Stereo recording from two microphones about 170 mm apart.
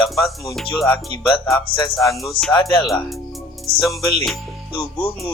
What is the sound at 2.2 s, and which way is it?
Speech, centre (ahead or behind).